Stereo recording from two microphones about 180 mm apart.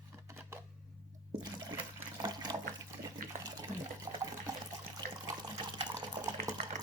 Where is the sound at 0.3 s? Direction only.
15° right (ahead or behind).